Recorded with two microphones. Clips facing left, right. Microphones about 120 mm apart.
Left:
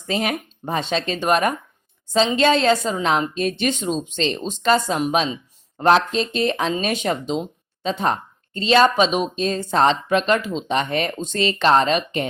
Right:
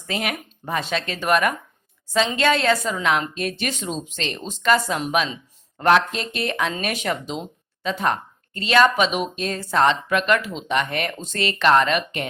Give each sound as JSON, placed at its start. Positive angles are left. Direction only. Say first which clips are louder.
{"t": 0.1, "sound": "speech", "louder": "left 4 dB", "side_deg": 25}